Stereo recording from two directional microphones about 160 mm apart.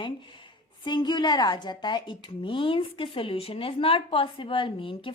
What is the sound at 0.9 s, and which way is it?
A woman's voice, 30° left (ahead or behind).